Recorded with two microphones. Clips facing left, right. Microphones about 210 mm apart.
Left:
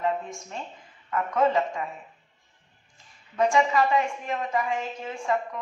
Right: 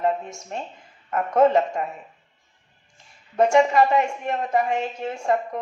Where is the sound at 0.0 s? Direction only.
45° right (ahead or behind).